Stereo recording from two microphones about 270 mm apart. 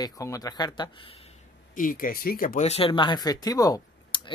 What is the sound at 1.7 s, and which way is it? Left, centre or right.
Speech, left.